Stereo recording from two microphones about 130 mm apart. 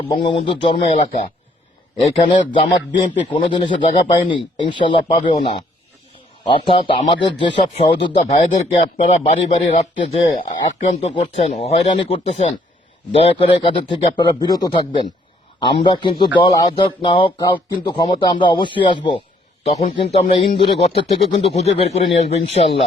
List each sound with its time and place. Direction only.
0.2 s speech: 45° left (ahead or behind)
0.9 s a man's voice: 60° left (ahead or behind)
2.4 s a man's voice: 40° left (ahead or behind)
6.7 s speech: 40° left (ahead or behind); by 10.3 s 60° left (ahead or behind)
11.1 s a man's voice: 50° left (ahead or behind)
19.7 s speech: 50° left (ahead or behind)